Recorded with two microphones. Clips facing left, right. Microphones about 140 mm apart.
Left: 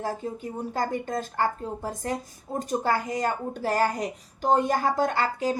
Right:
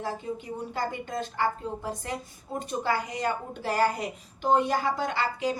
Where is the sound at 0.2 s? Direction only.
40° left (ahead or behind).